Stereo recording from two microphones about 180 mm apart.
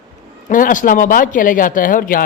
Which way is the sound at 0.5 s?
45° left (ahead or behind).